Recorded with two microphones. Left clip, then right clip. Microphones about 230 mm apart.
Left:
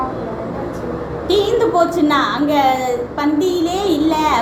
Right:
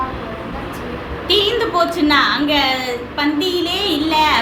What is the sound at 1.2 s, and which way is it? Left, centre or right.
A woman's voice, centre.